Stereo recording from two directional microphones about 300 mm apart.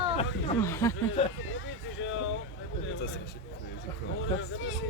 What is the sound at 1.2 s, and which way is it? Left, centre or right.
Speech, left.